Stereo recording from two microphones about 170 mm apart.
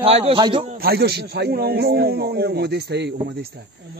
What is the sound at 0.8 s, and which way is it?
A man's voice, 65° right (ahead or behind).